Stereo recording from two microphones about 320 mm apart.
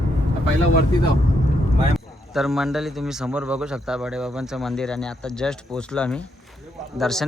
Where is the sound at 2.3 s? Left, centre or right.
Centre.